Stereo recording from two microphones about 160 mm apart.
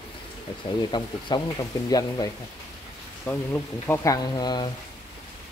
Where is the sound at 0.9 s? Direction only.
25° left (ahead or behind).